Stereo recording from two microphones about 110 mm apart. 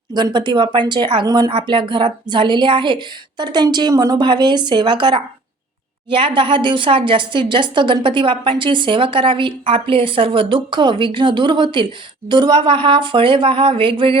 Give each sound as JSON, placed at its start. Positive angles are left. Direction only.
{"t": 0.1, "sound": "a woman's voice", "side_deg": -45}